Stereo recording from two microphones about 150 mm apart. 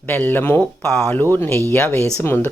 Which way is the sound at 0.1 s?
10° left (ahead or behind).